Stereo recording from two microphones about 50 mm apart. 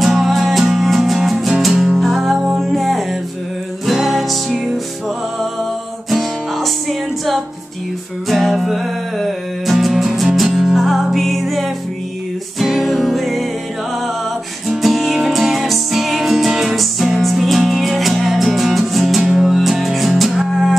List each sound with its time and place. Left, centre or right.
0.0 s music: centre
6.0 s music: centre
14.8 s music: centre